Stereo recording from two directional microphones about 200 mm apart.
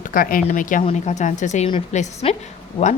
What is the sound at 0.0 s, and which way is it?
A woman's voice, 45° left (ahead or behind).